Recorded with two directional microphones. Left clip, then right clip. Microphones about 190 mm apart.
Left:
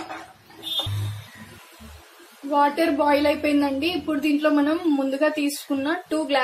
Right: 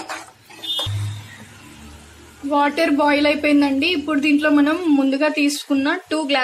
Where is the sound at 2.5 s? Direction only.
15° right (ahead or behind).